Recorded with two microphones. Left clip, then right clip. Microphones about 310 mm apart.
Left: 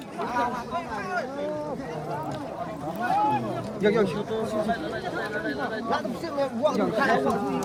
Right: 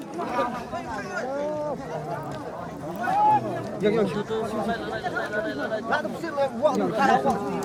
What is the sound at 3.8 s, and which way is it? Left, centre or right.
Speech, centre.